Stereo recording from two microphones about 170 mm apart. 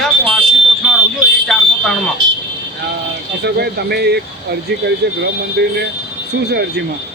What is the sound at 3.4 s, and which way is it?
Speech, 75° right (ahead or behind).